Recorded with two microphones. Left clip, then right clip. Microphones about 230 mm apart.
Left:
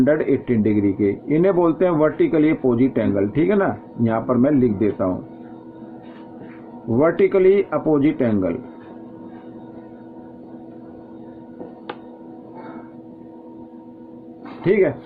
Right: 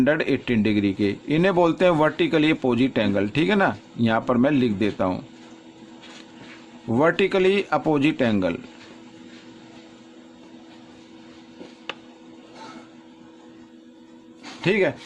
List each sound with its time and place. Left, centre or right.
0.0 s a man's voice: right
6.9 s a man's voice: right
14.6 s speech: right